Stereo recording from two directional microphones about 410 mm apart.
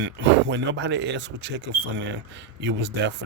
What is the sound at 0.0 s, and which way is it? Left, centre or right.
Speech, right.